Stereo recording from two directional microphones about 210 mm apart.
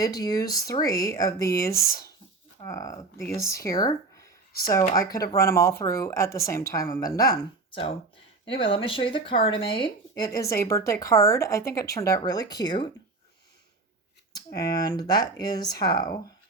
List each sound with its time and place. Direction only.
0.0 s speech: 15° left (ahead or behind)
14.3 s speech: 15° left (ahead or behind)